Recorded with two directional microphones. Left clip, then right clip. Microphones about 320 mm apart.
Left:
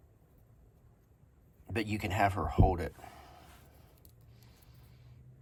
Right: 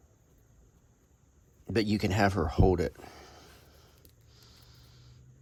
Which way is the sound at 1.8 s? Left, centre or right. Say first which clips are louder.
Right 1 dB; right.